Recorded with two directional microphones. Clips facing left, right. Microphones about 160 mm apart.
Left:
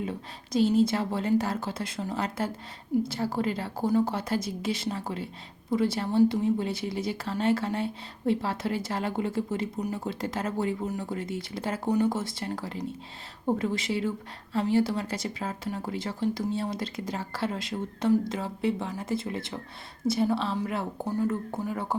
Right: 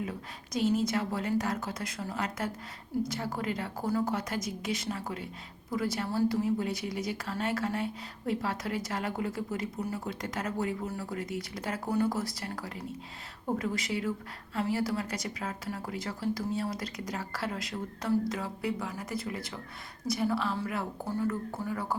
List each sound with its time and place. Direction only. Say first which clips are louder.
0.0 s a woman's voice: left 3 dB; 30° left (ahead or behind)